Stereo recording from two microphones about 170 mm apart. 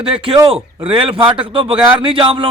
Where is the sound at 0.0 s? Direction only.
30° right (ahead or behind).